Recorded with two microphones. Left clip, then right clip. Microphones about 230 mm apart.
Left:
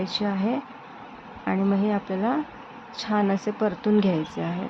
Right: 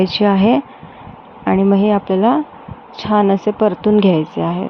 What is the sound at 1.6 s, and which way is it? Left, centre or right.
Speech, right.